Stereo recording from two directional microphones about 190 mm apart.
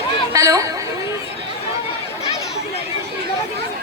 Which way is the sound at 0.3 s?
20° right (ahead or behind).